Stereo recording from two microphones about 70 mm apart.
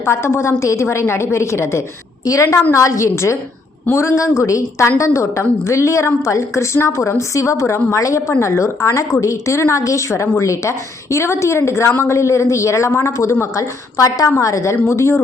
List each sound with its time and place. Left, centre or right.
0.0 s a woman's voice: left
14.0 s a woman's voice: left
14.3 s a woman's voice: left